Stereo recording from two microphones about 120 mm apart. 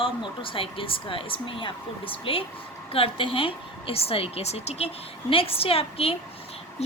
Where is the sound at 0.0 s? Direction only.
45° left (ahead or behind).